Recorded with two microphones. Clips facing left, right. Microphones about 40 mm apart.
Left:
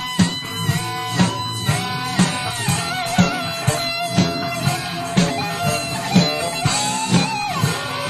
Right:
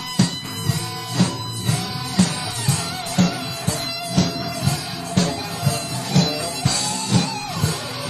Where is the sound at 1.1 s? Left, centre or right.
Left.